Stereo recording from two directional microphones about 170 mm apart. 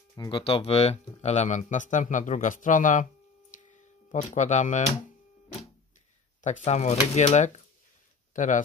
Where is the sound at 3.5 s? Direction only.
50° left (ahead or behind).